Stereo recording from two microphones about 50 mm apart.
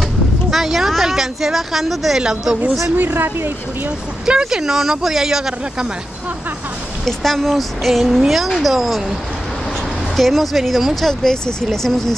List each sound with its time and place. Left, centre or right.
0.5 s speech: centre
3.0 s speech: right
4.3 s speech: centre
7.1 s speech: centre
10.1 s speech: centre
11.1 s speech: centre